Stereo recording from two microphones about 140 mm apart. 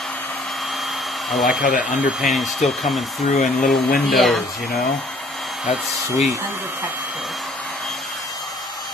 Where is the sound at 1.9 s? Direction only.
Centre (ahead or behind).